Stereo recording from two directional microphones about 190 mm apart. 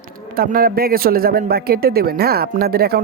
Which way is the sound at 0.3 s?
50° right (ahead or behind).